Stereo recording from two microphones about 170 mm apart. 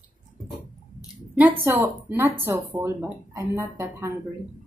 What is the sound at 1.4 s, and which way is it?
Speech, 10° right (ahead or behind).